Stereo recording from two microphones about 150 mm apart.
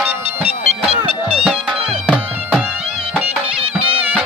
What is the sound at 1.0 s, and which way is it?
Music, 40° right (ahead or behind).